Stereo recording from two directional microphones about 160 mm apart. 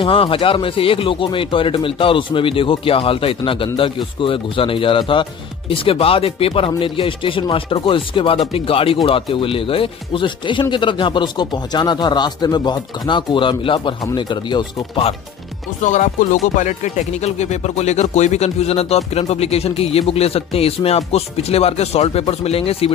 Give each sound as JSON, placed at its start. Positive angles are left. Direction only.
{"t": 0.0, "sound": "speech", "side_deg": 35}
{"t": 15.8, "sound": "speech", "side_deg": 50}